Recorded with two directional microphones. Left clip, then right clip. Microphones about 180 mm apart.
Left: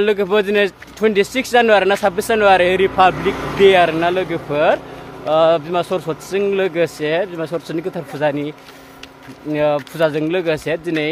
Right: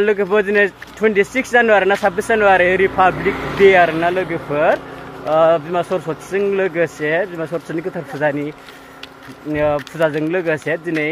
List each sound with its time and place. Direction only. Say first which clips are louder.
0.0 s speech: even; 15° left (ahead or behind)
9.5 s speech: left 1 dB; 20° left (ahead or behind)